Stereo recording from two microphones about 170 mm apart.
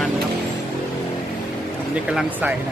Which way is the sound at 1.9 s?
5° right (ahead or behind).